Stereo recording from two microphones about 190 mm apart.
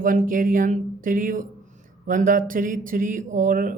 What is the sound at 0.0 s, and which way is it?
Speech, 45° right (ahead or behind).